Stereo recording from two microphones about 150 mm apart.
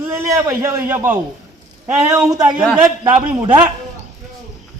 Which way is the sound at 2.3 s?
30° right (ahead or behind).